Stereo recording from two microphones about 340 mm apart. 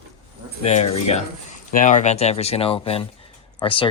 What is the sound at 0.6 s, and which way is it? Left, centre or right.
Speech, centre.